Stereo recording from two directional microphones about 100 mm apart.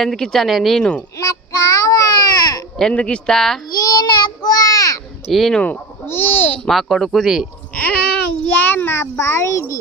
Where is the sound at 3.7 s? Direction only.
40° left (ahead or behind).